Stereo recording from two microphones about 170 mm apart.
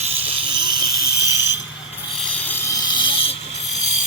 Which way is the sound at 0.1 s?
10° right (ahead or behind).